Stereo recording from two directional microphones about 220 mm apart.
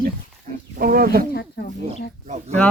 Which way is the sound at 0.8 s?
40° right (ahead or behind).